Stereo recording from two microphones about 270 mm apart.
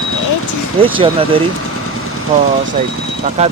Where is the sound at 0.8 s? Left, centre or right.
Centre.